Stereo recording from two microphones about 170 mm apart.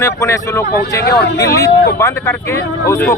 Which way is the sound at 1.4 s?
20° left (ahead or behind).